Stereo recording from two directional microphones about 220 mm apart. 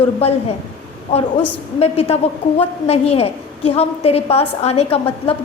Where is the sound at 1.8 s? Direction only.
25° left (ahead or behind).